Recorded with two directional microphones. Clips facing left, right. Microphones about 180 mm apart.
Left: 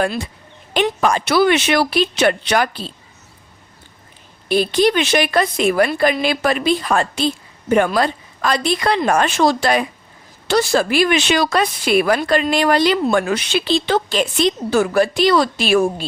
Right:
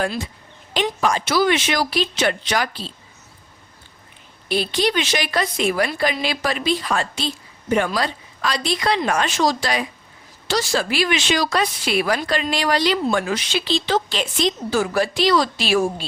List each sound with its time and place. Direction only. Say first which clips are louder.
0.0 s speech: left 4 dB; 60° left (ahead or behind)
4.4 s a woman's voice: left 6 dB; 50° left (ahead or behind)